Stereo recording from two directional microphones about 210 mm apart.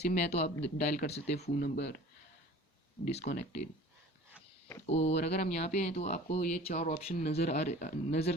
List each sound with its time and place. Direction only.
0.0 s speech: 30° left (ahead or behind)
1.5 s speech: 45° left (ahead or behind)
3.0 s speech: 30° left (ahead or behind)
4.9 s speech: 30° left (ahead or behind)